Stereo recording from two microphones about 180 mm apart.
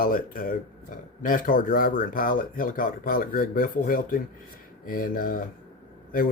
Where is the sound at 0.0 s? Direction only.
50° left (ahead or behind).